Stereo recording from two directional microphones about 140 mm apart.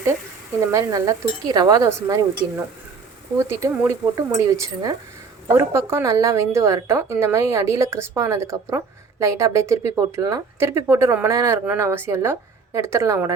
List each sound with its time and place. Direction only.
0.6 s speech: 20° right (ahead or behind)
3.3 s speech: 20° right (ahead or behind)